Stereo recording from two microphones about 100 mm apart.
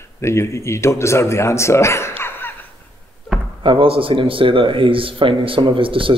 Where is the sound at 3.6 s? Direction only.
65° right (ahead or behind).